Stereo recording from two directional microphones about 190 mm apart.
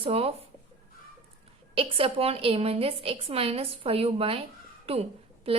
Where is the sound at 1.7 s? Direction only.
30° right (ahead or behind).